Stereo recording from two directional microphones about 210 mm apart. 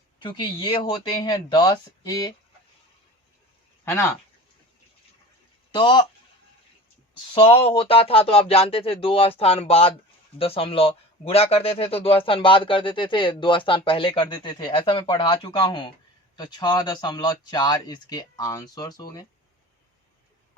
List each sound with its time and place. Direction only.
0.2 s speech: 25° left (ahead or behind)
5.7 s speech: 20° left (ahead or behind)
7.3 s speech: 25° left (ahead or behind)